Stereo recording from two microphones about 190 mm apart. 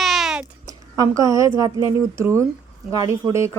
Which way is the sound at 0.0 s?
Centre (ahead or behind).